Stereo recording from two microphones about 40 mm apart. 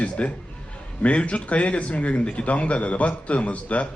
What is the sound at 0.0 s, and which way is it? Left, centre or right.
A man's voice, left.